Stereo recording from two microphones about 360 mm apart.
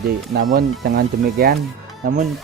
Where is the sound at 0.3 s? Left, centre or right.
Right.